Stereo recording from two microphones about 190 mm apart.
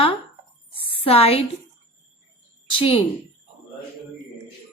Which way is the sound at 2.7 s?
30° left (ahead or behind).